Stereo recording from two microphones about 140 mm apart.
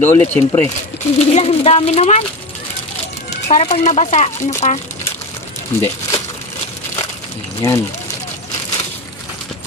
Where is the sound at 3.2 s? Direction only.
55° left (ahead or behind).